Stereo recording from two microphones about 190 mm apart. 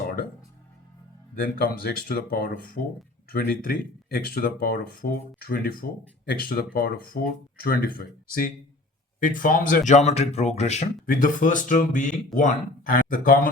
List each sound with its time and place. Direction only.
1.5 s speech: 50° left (ahead or behind)